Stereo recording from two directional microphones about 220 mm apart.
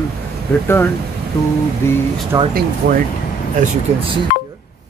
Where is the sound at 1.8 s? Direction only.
10° left (ahead or behind).